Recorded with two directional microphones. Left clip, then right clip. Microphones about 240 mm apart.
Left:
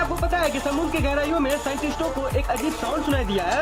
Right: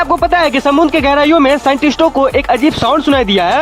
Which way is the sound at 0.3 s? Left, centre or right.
Right.